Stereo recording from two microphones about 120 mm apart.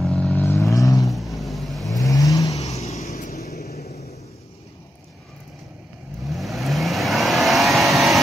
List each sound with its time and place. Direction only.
0.0 s vehicle: 5° left (ahead or behind); by 1.0 s 30° left (ahead or behind)
1.0 s vehicle: centre (ahead or behind)
2.0 s vehicle: 30° left (ahead or behind)
2.8 s vehicle: 65° left (ahead or behind)
6.2 s vehicle: centre (ahead or behind)